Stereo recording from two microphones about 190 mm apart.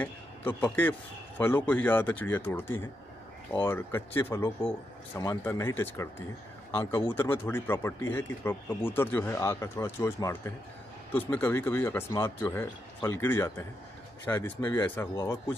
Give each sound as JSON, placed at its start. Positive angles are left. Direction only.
{"t": 0.0, "sound": "a man's voice", "side_deg": 10}